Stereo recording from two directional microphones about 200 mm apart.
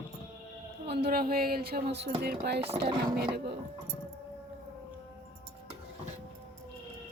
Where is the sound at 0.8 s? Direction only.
55° right (ahead or behind).